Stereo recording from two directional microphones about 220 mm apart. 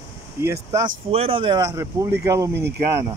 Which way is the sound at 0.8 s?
25° right (ahead or behind).